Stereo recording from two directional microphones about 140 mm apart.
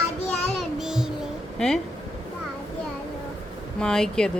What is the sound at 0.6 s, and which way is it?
Child singing, 5° right (ahead or behind).